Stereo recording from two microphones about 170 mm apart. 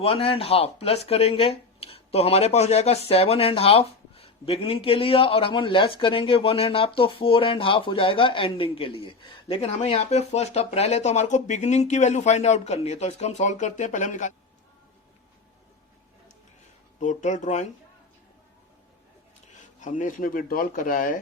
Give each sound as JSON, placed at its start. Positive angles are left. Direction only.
{"t": 0.0, "sound": "speech", "side_deg": 35}
{"t": 9.6, "sound": "speech", "side_deg": 40}
{"t": 17.0, "sound": "speech", "side_deg": 45}
{"t": 19.5, "sound": "speech", "side_deg": 45}